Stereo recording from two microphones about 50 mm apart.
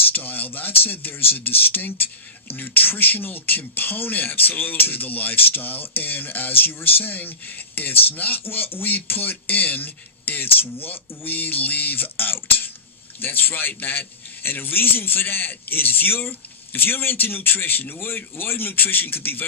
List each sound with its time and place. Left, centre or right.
0.1 s a man's voice: left